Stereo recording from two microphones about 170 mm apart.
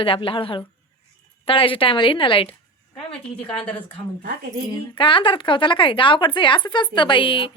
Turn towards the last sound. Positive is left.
turn(degrees=30)  # may be behind; listen again after turning